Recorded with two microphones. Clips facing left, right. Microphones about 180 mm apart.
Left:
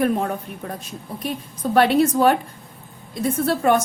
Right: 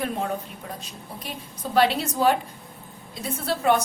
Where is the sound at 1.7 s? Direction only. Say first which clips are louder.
Left 5 dB; 55° left (ahead or behind).